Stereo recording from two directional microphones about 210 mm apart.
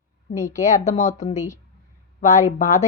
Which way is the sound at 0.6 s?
35° left (ahead or behind).